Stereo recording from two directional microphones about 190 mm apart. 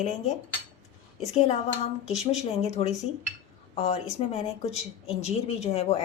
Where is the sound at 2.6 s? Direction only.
35° left (ahead or behind).